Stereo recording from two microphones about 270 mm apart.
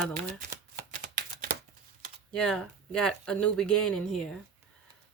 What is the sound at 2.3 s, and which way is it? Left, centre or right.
Speech, centre.